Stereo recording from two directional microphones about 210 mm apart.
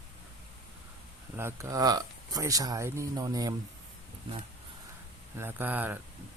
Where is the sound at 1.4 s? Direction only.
15° right (ahead or behind).